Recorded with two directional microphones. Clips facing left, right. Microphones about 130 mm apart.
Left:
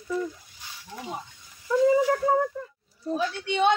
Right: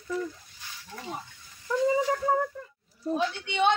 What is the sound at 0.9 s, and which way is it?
Speech, 15° left (ahead or behind).